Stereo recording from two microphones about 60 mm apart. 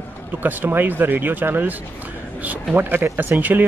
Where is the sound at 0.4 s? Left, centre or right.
Right.